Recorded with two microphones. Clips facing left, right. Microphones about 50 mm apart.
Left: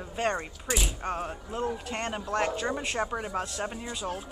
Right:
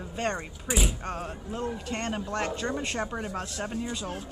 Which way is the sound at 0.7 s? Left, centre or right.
Centre.